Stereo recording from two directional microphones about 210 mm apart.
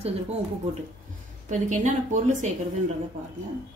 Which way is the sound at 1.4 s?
35° right (ahead or behind).